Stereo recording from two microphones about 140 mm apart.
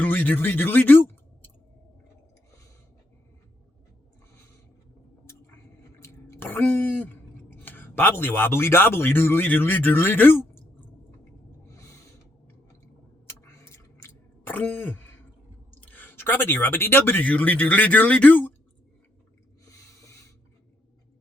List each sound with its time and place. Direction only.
0.0 s speech: 10° left (ahead or behind)
6.0 s speech: 20° left (ahead or behind)
11.7 s owl: 20° left (ahead or behind)
13.2 s chewing: 20° left (ahead or behind)
15.8 s speech: 10° left (ahead or behind)
19.6 s snort: 20° left (ahead or behind)